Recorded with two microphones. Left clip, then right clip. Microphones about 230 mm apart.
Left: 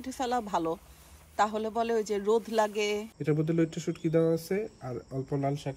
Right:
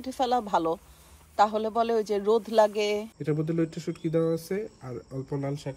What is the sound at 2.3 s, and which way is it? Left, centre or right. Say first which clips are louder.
Speech: right 7 dB; right.